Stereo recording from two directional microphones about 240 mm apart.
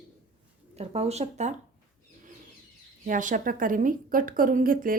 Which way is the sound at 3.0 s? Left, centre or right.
Right.